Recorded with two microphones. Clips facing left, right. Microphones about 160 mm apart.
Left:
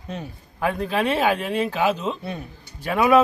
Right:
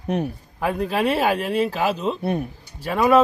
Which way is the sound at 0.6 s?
Centre (ahead or behind).